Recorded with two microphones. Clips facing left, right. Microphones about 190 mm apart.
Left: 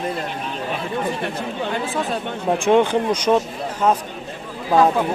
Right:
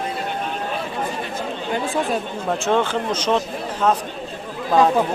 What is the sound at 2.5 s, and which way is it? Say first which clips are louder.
Speech: left 4 dB; 15° left (ahead or behind).